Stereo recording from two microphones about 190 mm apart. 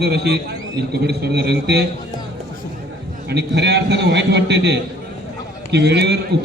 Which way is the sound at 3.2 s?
60° right (ahead or behind).